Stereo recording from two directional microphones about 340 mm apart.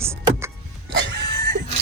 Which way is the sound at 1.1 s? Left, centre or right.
Right.